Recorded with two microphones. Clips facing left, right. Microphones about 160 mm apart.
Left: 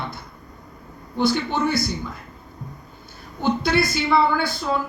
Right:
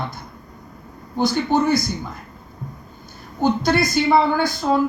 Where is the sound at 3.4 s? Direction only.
40° right (ahead or behind).